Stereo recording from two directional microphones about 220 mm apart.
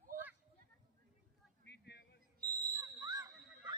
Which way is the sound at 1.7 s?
50° left (ahead or behind).